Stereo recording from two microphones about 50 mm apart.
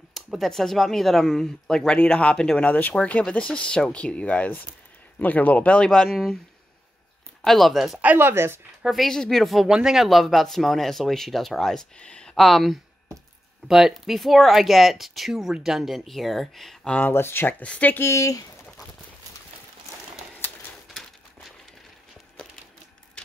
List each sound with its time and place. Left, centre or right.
0.4 s speech: centre
2.6 s speech: left
5.2 s speech: left
5.9 s speech: centre
7.4 s speech: centre
8.2 s speech: right
8.9 s speech: centre
9.7 s speech: centre
10.0 s speech: centre
12.0 s a sound: centre
12.4 s speech: centre
13.7 s speech: centre
17.1 s speech: left
17.6 s speech: left